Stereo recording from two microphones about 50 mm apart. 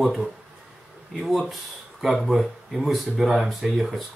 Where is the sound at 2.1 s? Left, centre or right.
Centre.